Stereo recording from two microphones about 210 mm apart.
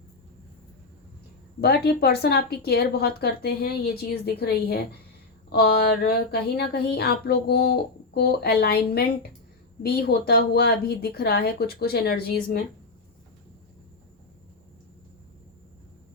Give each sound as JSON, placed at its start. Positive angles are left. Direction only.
{"t": 1.6, "sound": "a woman's voice", "side_deg": 50}